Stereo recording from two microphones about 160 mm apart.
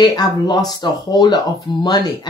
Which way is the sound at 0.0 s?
25° left (ahead or behind).